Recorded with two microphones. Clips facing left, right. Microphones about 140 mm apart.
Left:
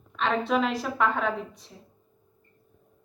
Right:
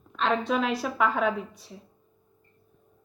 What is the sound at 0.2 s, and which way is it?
A woman's voice, centre (ahead or behind).